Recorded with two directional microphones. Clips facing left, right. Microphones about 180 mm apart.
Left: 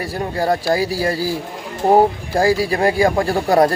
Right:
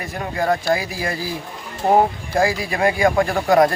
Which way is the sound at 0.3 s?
35° left (ahead or behind).